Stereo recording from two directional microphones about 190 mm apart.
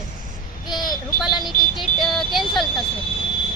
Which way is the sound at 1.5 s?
Centre (ahead or behind).